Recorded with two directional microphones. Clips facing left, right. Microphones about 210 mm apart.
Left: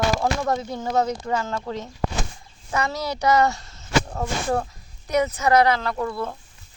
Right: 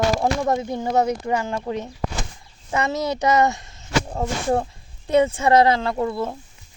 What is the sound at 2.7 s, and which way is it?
Speech, 20° right (ahead or behind).